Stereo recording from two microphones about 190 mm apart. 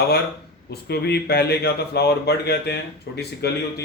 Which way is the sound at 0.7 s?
60° left (ahead or behind).